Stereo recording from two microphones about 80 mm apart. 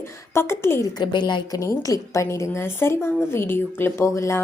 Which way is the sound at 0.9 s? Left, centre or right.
Left.